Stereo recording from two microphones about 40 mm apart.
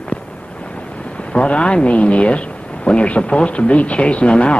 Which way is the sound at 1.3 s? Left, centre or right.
Left.